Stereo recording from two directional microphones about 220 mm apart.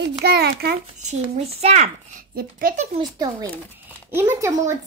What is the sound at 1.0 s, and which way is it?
Speech, 30° right (ahead or behind).